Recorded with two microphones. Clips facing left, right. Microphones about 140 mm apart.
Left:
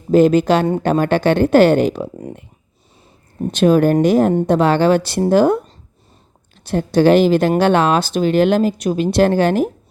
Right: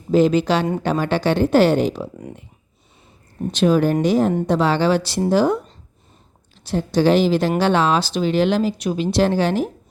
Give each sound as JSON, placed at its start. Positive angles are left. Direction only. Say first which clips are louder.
{"t": 0.1, "sound": "speech", "louder": "left 4 dB", "side_deg": 50}
{"t": 3.5, "sound": "speech", "louder": "left 4 dB", "side_deg": 50}
{"t": 6.7, "sound": "speech", "louder": "left 4 dB", "side_deg": 55}